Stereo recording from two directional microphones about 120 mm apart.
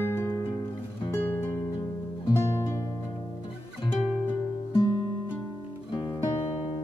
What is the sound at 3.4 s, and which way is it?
Music, 45° left (ahead or behind).